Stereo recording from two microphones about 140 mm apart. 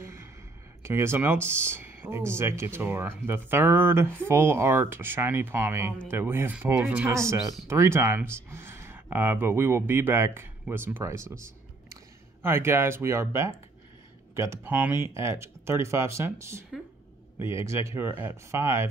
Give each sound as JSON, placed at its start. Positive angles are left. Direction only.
{"t": 0.0, "sound": "a sound", "side_deg": -20}
{"t": 0.8, "sound": "speech", "side_deg": -20}
{"t": 12.4, "sound": "speech", "side_deg": -15}